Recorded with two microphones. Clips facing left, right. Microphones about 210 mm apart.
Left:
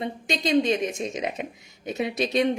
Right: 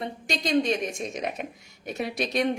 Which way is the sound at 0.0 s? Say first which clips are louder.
Left 3 dB; 25° left (ahead or behind).